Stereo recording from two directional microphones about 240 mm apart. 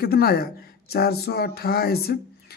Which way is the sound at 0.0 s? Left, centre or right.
Left.